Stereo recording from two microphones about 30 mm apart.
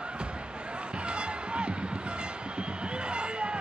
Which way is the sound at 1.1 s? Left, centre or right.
Right.